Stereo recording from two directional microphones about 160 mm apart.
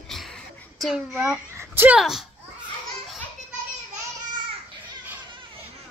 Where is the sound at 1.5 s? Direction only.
15° right (ahead or behind).